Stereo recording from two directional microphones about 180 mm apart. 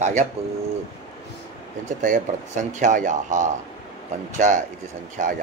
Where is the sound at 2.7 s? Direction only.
45° right (ahead or behind).